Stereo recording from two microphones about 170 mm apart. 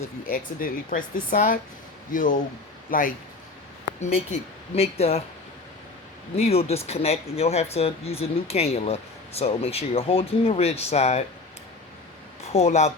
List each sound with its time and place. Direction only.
0.3 s speech: 55° left (ahead or behind)
4.0 s speech: 45° left (ahead or behind)
6.3 s speech: 35° left (ahead or behind)
12.5 s speech: 40° left (ahead or behind)